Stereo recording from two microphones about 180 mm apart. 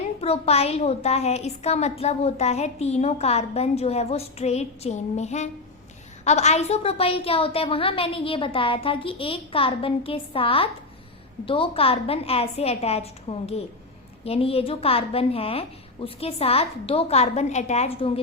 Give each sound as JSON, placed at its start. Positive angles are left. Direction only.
{"t": 0.2, "sound": "a woman's voice", "side_deg": 35}